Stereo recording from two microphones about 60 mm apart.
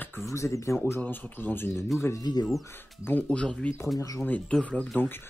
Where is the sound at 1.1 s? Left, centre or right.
Left.